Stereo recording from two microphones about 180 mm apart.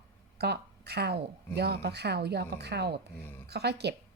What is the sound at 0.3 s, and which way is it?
A woman's voice, 65° right (ahead or behind).